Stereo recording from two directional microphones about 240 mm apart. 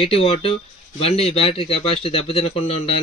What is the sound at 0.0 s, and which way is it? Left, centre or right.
A man's voice, left.